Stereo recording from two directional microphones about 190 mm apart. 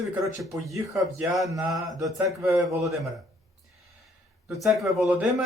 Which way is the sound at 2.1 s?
15° right (ahead or behind).